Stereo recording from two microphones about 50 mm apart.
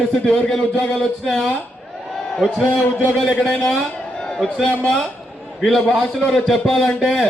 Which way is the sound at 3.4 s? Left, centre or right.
Centre.